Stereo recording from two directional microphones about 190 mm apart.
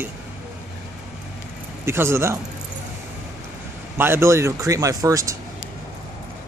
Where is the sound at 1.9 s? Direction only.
15° right (ahead or behind).